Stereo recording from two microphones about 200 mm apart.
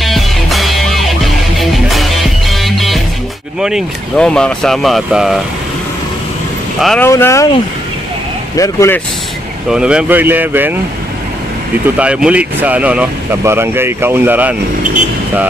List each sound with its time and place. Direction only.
0.0 s music: centre (ahead or behind)
3.6 s speech: centre (ahead or behind)
6.8 s speech: centre (ahead or behind)
7.1 s speech: 15° left (ahead or behind)
8.5 s speech: 15° left (ahead or behind)
9.7 s speech: 5° right (ahead or behind)
12.0 s speech: 5° right (ahead or behind)